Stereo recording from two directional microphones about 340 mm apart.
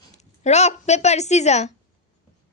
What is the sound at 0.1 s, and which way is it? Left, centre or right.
A woman's voice, centre.